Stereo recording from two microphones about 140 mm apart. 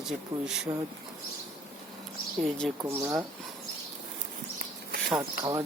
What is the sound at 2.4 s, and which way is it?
Speech, centre (ahead or behind).